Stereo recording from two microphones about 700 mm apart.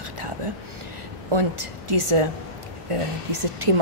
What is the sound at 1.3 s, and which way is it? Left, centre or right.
A woman's voice, right.